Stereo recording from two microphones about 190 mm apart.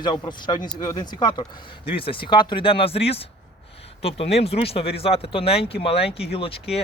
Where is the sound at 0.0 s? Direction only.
25° left (ahead or behind).